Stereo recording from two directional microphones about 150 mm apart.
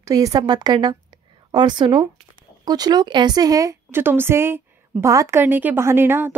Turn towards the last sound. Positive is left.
turn(degrees=-15)  # may be behind; listen again after turning